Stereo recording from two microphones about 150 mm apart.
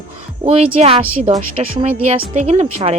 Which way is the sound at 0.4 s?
40° right (ahead or behind).